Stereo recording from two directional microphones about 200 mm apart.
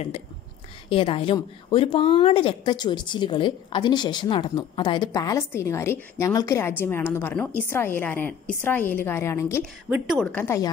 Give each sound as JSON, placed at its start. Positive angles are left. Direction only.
{"t": 0.8, "sound": "a woman's voice", "side_deg": 25}
{"t": 9.6, "sound": "a woman's voice", "side_deg": -10}
{"t": 10.3, "sound": "a woman's voice", "side_deg": 10}